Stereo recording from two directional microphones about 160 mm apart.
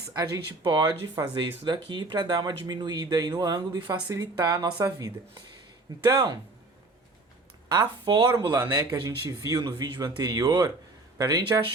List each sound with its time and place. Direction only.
0.1 s speech: 25° right (ahead or behind)
7.7 s speech: 25° right (ahead or behind)